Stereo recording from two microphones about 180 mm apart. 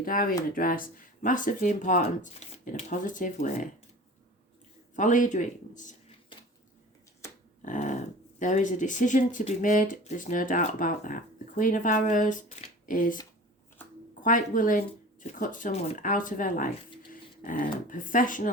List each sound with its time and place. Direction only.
0.0 s speech: 50° left (ahead or behind)
4.9 s speech: 45° left (ahead or behind)
7.2 s a sound: 15° left (ahead or behind)
7.6 s speech: 45° left (ahead or behind)
14.2 s speech: 45° left (ahead or behind)